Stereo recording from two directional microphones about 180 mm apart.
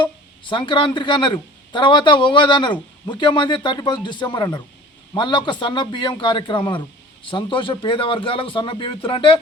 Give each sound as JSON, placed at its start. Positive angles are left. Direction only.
{"t": 0.0, "sound": "a man's voice", "side_deg": 25}